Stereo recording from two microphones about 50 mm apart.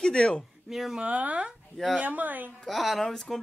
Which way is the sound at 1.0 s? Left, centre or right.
Right.